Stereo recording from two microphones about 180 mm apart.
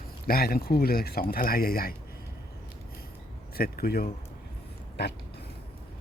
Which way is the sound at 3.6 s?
55° left (ahead or behind).